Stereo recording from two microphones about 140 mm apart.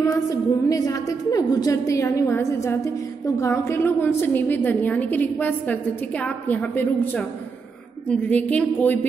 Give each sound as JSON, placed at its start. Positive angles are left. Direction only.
{"t": 0.1, "sound": "a woman's voice", "side_deg": 25}